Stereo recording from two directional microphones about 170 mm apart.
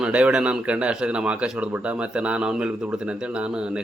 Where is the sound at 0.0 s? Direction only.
5° right (ahead or behind).